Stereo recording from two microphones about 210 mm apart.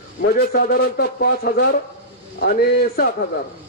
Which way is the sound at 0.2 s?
45° left (ahead or behind).